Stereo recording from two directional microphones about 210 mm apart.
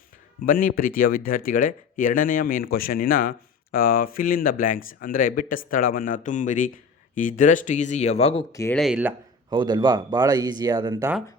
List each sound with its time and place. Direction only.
0.4 s speech: 40° left (ahead or behind)
8.7 s speech: centre (ahead or behind)
9.5 s speech: 20° right (ahead or behind)